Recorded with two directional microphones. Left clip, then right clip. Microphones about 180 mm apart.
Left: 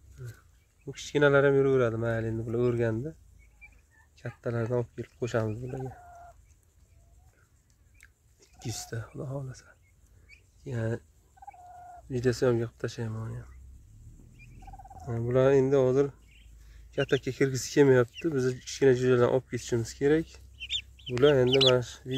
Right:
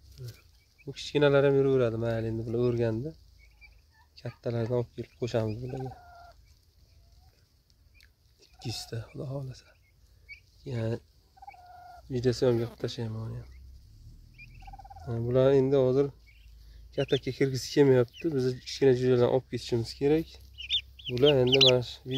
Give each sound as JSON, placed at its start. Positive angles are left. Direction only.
{"t": 0.8, "sound": "speech", "side_deg": -5}
{"t": 4.2, "sound": "speech", "side_deg": -5}
{"t": 5.5, "sound": "speech", "side_deg": -20}
{"t": 8.0, "sound": "chewing", "side_deg": 0}
{"t": 9.2, "sound": "speech", "side_deg": 0}
{"t": 12.1, "sound": "speech", "side_deg": -10}
{"t": 15.0, "sound": "speech", "side_deg": -5}